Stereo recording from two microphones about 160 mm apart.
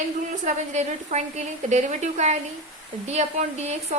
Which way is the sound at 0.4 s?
45° right (ahead or behind).